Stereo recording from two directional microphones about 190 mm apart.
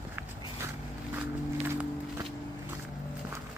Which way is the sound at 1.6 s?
10° right (ahead or behind).